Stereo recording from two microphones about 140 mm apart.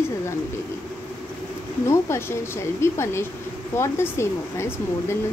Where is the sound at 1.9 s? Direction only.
20° left (ahead or behind).